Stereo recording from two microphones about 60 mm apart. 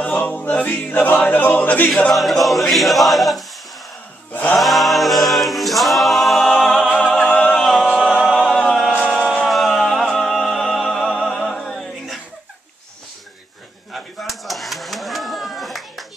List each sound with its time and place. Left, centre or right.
0.0 s a capella: left
2.1 s a capella: centre
4.3 s music: left
4.6 s a capella: centre
7.2 s a capella: centre
7.6 s a capella: centre
8.2 s music: centre
8.7 s a capella: centre
9.5 s music: centre
13.9 s a sound: centre